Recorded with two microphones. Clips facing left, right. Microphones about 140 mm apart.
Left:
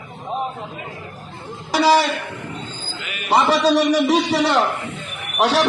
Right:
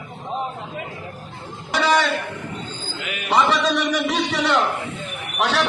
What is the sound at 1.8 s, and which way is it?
Speech, 35° left (ahead or behind).